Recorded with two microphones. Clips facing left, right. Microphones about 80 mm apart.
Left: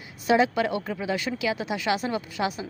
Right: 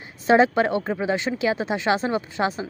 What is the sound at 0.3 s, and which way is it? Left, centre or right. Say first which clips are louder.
A woman's voice: right 4 dB; right.